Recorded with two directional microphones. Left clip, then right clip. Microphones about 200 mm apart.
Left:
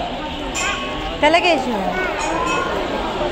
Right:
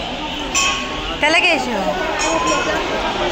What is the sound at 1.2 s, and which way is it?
Speech, 20° left (ahead or behind).